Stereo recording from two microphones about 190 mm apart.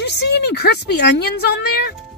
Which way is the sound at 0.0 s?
60° left (ahead or behind).